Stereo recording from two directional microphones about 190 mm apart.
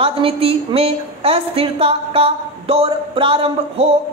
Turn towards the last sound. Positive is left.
turn(degrees=-30)  # may be behind; listen again after turning